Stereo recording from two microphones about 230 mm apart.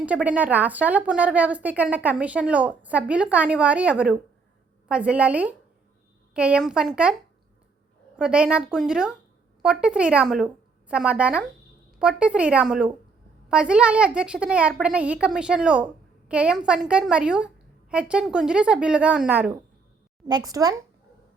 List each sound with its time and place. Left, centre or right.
0.0 s a woman's voice: centre